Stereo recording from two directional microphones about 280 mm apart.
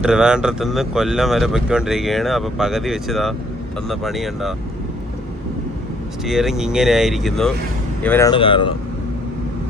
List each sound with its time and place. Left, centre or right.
0.0 s speech: centre
6.2 s speech: centre